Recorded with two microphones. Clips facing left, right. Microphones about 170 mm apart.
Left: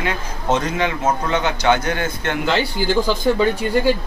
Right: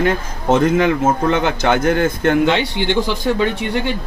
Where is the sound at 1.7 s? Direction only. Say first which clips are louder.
Right 6 dB; 50° right (ahead or behind).